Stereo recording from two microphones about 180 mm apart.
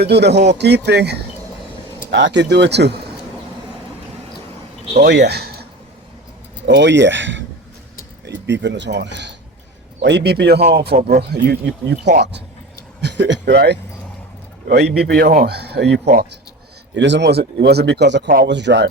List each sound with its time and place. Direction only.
0.0 s speech: 65° right (ahead or behind)
2.1 s speech: 80° right
5.0 s speech: 70° right (ahead or behind)
6.7 s speech: 80° right
8.3 s speech: 75° right (ahead or behind)
16.9 s speech: 80° right